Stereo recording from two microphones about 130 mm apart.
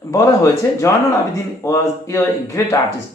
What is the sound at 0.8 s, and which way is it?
Speech, 25° left (ahead or behind).